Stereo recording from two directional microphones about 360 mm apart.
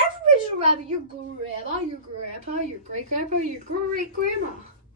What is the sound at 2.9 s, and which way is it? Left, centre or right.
Speech, centre.